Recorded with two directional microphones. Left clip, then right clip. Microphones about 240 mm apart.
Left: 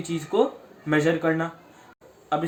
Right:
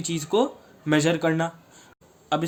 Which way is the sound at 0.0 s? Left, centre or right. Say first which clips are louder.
Even; right.